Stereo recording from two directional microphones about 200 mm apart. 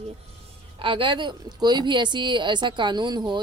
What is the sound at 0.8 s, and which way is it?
A woman's voice, 25° right (ahead or behind).